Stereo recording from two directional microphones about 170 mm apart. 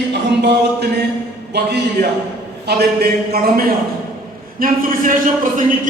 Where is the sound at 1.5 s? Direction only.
75° right (ahead or behind).